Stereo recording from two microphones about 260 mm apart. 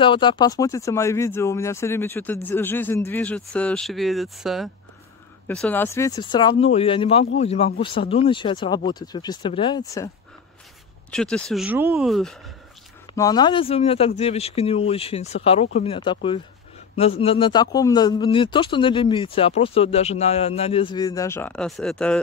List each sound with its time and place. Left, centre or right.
0.0 s speech: centre
11.1 s speech: centre
13.1 s speech: centre